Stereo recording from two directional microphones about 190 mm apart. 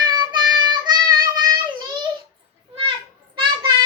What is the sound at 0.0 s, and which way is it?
Child singing, 25° right (ahead or behind).